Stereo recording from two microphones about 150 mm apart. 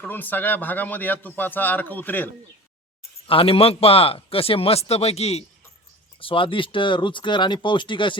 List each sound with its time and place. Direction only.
0.0 s a man's voice: 10° left (ahead or behind)
3.2 s a man's voice: 40° left (ahead or behind)